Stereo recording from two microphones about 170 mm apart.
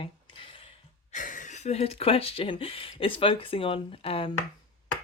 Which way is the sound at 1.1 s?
50° left (ahead or behind).